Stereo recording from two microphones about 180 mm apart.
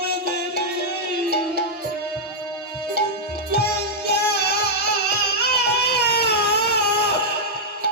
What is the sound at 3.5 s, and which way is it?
Music, 65° left (ahead or behind).